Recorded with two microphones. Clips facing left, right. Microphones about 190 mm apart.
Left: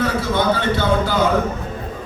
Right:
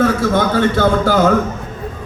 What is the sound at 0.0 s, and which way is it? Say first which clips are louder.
Speech: right 5 dB; 50° right (ahead or behind).